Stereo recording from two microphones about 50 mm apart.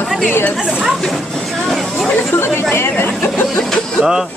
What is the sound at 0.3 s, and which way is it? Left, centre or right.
Speech, left.